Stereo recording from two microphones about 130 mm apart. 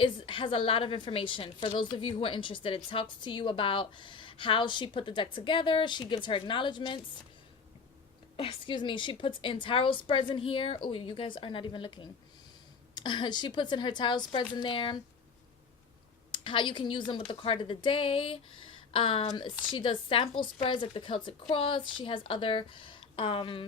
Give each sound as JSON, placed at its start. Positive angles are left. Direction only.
{"t": 0.0, "sound": "a woman's voice", "side_deg": 40}
{"t": 8.4, "sound": "a woman's voice", "side_deg": 40}
{"t": 16.3, "sound": "a woman's voice", "side_deg": 40}